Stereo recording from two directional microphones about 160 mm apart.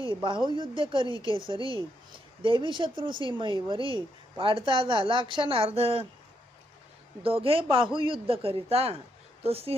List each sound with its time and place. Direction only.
0.0 s speech: 30° right (ahead or behind)
7.2 s speech: 35° right (ahead or behind)